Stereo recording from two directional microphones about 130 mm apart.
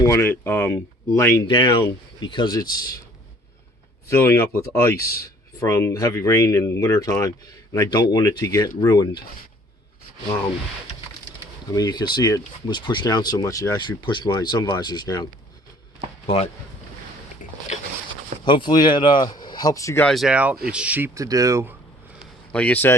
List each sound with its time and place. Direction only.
0.0 s speech: 20° left (ahead or behind)
1.5 s speech: 40° left (ahead or behind)
4.2 s speech: 20° left (ahead or behind)
11.7 s speech: 30° left (ahead or behind)
16.2 s speech: 50° left (ahead or behind)
18.4 s speech: 35° left (ahead or behind)
20.0 s speech: centre (ahead or behind)
20.3 s speech: 10° right (ahead or behind)
21.2 s speech: 25° right (ahead or behind)
22.5 s a man's voice: 10° left (ahead or behind)